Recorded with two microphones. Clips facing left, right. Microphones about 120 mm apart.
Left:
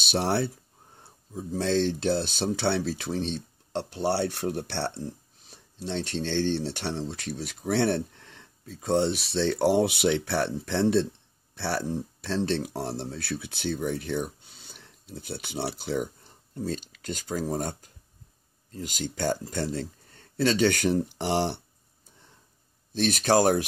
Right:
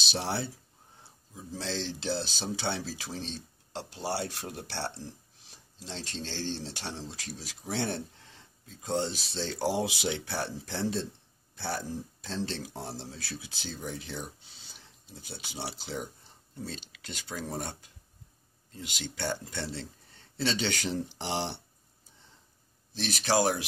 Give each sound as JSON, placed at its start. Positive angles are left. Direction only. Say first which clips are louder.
{"t": 0.0, "sound": "speech", "louder": "left 7 dB", "side_deg": 55}
{"t": 16.5, "sound": "speech", "louder": "left 9 dB", "side_deg": 45}
{"t": 22.9, "sound": "speech", "louder": "left 6 dB", "side_deg": 50}